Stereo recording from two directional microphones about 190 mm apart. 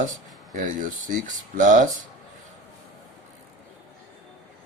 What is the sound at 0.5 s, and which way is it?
Speech, 45° right (ahead or behind).